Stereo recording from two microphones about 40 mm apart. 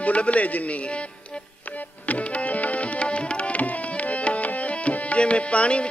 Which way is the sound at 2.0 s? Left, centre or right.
Left.